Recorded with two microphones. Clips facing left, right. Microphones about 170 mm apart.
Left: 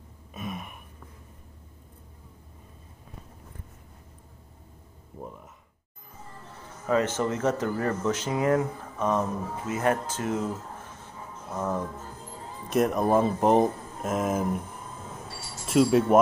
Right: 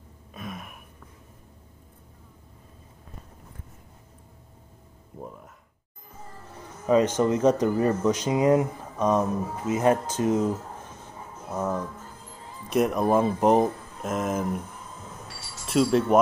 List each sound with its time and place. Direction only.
0.3 s gasp: centre (ahead or behind)
6.9 s speech: 15° right (ahead or behind)
11.4 s music: 10° right (ahead or behind)
12.6 s speech: centre (ahead or behind)
15.6 s speech: 5° left (ahead or behind)